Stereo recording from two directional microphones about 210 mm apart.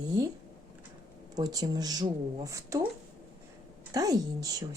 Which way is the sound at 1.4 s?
20° right (ahead or behind).